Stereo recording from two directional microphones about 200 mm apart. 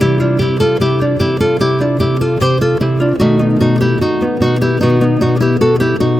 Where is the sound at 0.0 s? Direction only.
Centre (ahead or behind).